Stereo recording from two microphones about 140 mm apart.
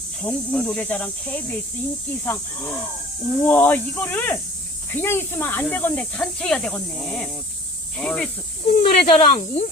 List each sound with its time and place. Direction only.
0.2 s speech: 5° left (ahead or behind)
8.6 s speech: 45° left (ahead or behind)